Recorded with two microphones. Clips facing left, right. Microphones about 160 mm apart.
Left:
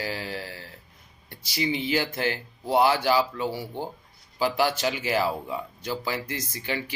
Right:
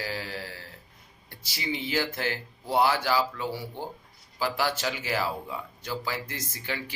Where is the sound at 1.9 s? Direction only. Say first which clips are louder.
Left 3 dB; 20° left (ahead or behind).